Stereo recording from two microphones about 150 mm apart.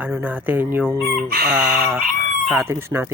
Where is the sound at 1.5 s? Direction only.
10° right (ahead or behind).